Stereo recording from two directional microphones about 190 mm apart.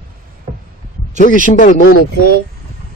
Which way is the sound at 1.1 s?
45° left (ahead or behind).